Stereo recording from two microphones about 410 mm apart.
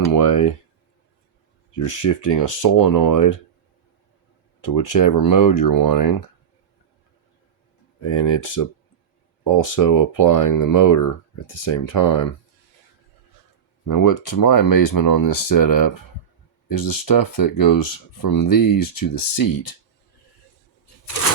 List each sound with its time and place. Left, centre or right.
0.1 s speech: left
2.0 s speech: left
4.6 s speech: left
8.1 s speech: left
8.4 s speech: left
13.8 s speech: left